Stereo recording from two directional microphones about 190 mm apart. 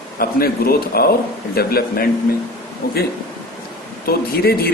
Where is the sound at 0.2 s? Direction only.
50° left (ahead or behind).